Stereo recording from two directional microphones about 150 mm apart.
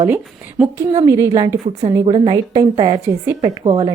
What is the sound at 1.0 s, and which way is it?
A woman's voice, 20° right (ahead or behind).